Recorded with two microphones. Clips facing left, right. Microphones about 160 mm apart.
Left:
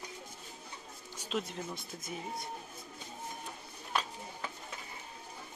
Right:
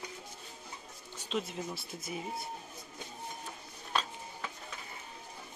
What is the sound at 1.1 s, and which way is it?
Music, 10° left (ahead or behind).